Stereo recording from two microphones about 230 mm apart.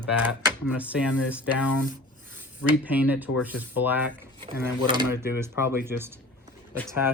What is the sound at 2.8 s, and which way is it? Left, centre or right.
Speech, centre.